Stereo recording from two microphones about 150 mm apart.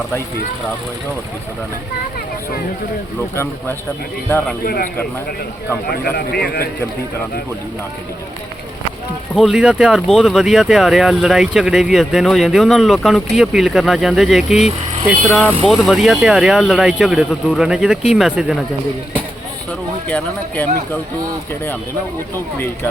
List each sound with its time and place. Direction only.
3.3 s speech: 15° left (ahead or behind)
4.6 s speech: 85° left
9.3 s speech: 5° right (ahead or behind)
20.1 s speech: 10° left (ahead or behind)